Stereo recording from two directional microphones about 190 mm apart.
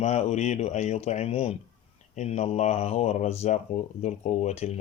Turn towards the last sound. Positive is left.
turn(degrees=35)  # may be behind; listen again after turning